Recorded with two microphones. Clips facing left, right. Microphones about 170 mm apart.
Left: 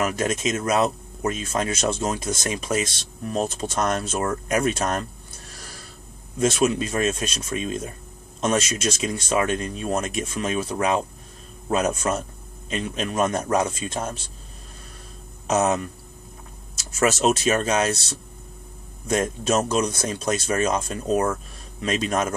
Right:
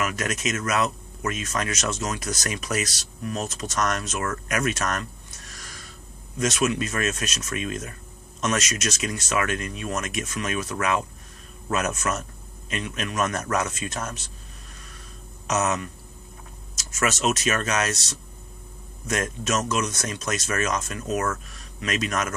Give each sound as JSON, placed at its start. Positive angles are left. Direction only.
{"t": 0.0, "sound": "speech", "side_deg": 30}
{"t": 15.4, "sound": "speech", "side_deg": 35}
{"t": 17.0, "sound": "speech", "side_deg": 35}
{"t": 19.0, "sound": "speech", "side_deg": 30}